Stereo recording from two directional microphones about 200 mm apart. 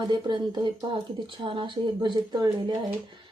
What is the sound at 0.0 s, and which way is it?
A woman's voice, 20° right (ahead or behind).